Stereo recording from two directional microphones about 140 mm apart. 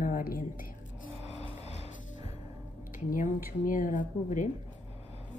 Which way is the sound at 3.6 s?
70° left (ahead or behind).